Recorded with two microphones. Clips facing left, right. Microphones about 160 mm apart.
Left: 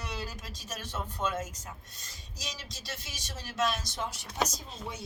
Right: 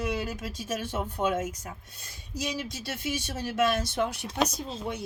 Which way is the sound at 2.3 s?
55° right (ahead or behind).